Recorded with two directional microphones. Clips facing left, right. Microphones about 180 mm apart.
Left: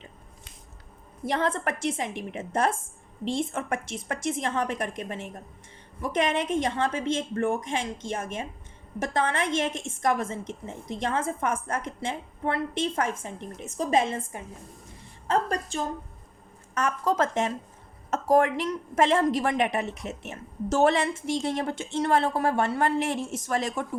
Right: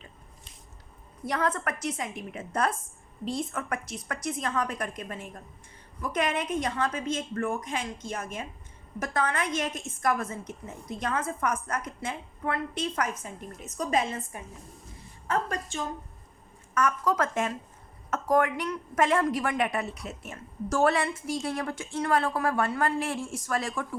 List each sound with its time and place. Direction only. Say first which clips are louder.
1.3 s a woman's voice: left 2 dB; 25° left (ahead or behind)